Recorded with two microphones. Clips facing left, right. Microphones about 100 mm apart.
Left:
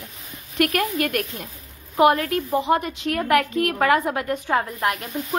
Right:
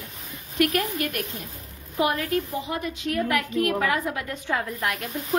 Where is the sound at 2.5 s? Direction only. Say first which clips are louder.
Left 8 dB; 75° left (ahead or behind); by 4.6 s 45° left (ahead or behind).